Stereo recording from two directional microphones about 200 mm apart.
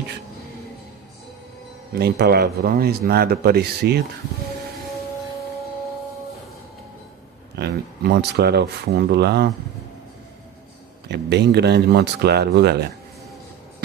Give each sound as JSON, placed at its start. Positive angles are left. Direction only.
{"t": 2.0, "sound": "speech", "side_deg": -55}
{"t": 7.5, "sound": "speech", "side_deg": -55}
{"t": 11.1, "sound": "speech", "side_deg": -55}